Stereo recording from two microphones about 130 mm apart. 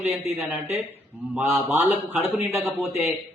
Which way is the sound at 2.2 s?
15° right (ahead or behind).